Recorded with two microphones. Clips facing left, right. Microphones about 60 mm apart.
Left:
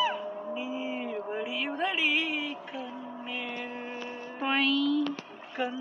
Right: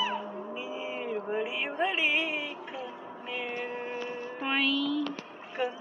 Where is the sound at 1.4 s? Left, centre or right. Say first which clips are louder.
Right 1 dB; right.